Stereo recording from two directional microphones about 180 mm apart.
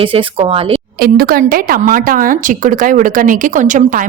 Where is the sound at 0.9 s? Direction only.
55° right (ahead or behind).